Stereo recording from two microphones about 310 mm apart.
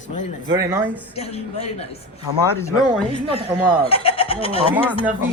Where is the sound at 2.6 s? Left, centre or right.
Centre.